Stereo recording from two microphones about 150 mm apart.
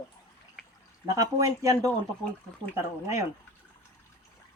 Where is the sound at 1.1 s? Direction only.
20° right (ahead or behind).